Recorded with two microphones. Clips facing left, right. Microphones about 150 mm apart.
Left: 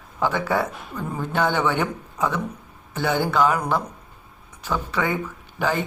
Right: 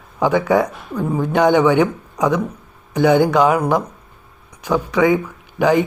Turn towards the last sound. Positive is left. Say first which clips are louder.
# right 9 dB
turn(degrees=-15)  # may be behind; listen again after turning